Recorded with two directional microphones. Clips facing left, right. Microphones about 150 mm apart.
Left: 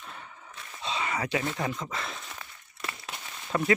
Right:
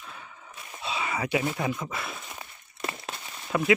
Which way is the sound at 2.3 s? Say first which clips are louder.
Right 2 dB; 20° right (ahead or behind).